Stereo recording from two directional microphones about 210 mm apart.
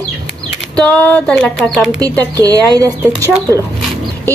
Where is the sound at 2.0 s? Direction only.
5° left (ahead or behind).